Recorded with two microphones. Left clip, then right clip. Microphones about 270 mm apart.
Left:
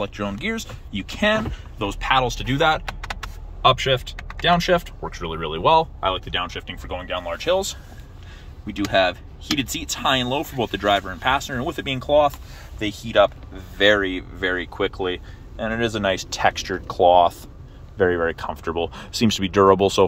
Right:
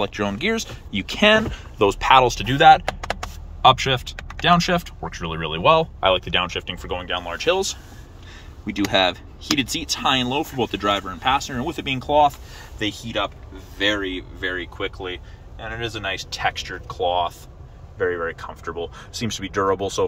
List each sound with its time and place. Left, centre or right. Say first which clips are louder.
0.0 s speech: right 3 dB; centre
3.6 s speech: right 2 dB; centre
13.7 s speech: left 5 dB; centre; by 20.1 s left